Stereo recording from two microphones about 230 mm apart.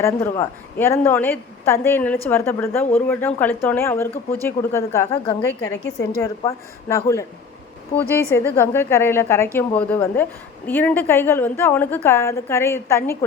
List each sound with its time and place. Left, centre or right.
0.0 s a woman's voice: centre
5.4 s a woman's voice: left
6.2 s a woman's voice: centre